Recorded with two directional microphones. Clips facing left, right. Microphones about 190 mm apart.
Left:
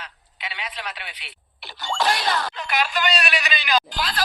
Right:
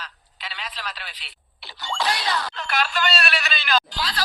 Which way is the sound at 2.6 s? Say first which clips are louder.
Left 1 dB; 15° left (ahead or behind).